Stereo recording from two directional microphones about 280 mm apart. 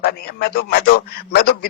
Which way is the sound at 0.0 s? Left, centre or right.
Left.